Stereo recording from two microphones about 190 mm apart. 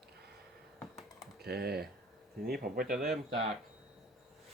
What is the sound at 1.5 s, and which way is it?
Speech, 55° right (ahead or behind).